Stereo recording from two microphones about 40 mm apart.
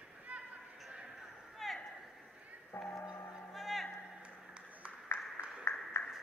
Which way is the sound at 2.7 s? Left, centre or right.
Left.